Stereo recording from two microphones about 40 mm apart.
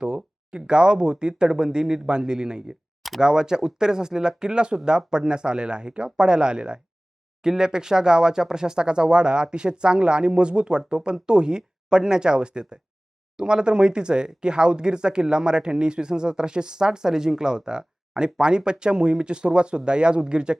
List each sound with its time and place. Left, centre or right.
0.0 s speech: right